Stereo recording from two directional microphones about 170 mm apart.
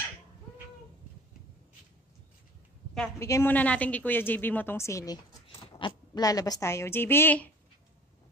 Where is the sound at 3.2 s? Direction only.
15° left (ahead or behind).